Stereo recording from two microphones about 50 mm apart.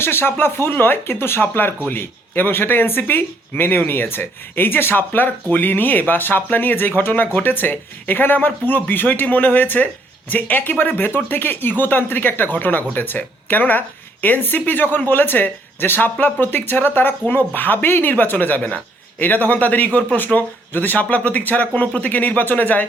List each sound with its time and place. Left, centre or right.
0.0 s speech: left